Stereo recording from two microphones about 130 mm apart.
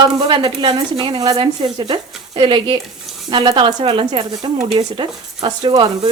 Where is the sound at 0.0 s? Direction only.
35° right (ahead or behind).